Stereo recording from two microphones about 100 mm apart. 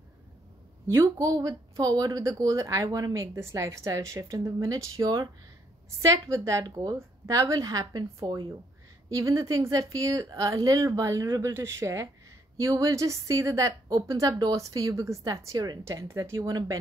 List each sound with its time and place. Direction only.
0.8 s speech: 30° right (ahead or behind)
15.8 s speech: 30° right (ahead or behind)